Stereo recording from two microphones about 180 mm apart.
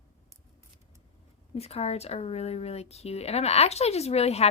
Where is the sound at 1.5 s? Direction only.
35° left (ahead or behind).